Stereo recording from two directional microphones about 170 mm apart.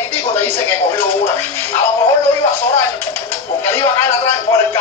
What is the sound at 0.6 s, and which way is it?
Television, 15° left (ahead or behind).